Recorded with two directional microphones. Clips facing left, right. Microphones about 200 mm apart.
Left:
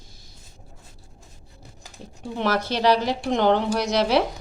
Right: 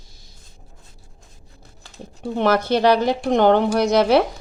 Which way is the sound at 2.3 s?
55° right (ahead or behind).